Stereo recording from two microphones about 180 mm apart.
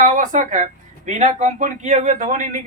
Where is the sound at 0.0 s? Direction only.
45° right (ahead or behind).